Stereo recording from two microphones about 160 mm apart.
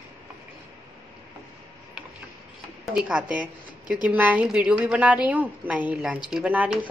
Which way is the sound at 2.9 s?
5° right (ahead or behind).